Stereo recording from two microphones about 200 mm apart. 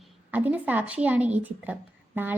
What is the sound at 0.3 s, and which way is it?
Speech, 10° right (ahead or behind).